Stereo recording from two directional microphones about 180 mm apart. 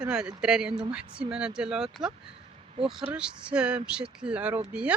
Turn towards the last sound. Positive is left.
turn(degrees=-5)  # may be behind; listen again after turning